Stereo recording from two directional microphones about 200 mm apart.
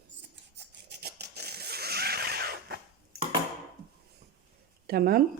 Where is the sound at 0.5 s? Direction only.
55° right (ahead or behind).